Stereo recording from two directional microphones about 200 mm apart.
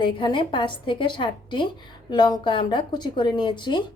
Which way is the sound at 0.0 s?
25° left (ahead or behind).